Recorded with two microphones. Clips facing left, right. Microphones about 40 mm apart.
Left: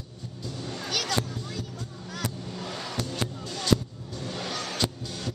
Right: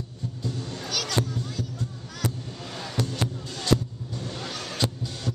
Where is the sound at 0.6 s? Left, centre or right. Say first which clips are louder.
Left 3 dB; centre.